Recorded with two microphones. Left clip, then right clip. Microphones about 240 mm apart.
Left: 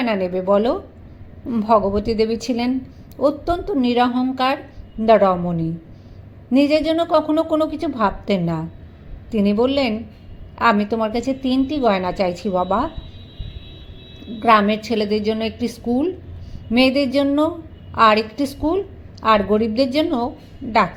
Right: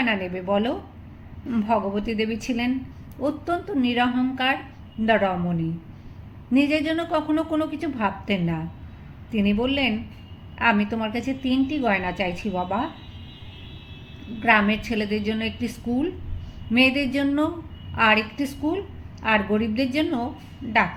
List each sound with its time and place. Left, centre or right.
0.0 s a woman's voice: left
2.0 s a woman's voice: left
14.4 s a woman's voice: left